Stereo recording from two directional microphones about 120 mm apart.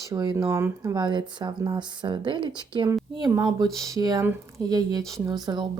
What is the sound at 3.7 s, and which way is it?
Speech, 30° right (ahead or behind).